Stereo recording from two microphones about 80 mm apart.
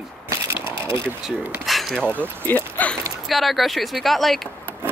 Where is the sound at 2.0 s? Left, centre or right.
Centre.